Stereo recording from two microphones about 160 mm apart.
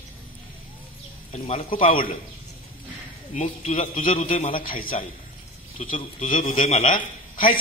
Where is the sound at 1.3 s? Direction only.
40° left (ahead or behind).